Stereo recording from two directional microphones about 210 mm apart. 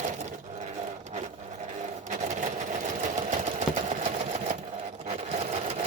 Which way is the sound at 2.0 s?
35° right (ahead or behind).